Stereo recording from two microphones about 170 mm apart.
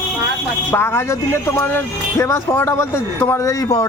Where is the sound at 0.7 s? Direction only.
15° left (ahead or behind).